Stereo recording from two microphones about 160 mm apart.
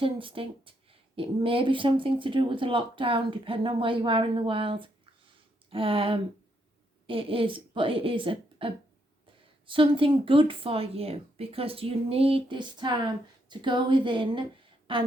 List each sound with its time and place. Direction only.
0.0 s a woman's voice: 35° right (ahead or behind)